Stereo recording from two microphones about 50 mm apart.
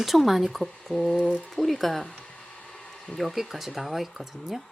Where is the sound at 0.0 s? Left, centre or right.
Centre.